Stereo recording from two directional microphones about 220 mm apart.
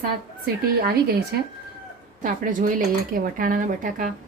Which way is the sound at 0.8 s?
45° right (ahead or behind).